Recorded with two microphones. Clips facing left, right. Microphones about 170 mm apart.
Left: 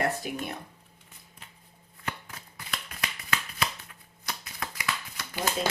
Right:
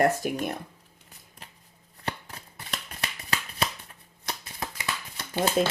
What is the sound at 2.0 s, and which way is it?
Shuffling cards, 35° right (ahead or behind).